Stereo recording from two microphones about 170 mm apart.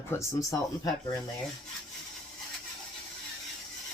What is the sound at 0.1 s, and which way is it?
Speech, 15° left (ahead or behind).